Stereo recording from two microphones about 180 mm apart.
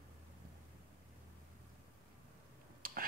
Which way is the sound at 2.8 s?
55° right (ahead or behind).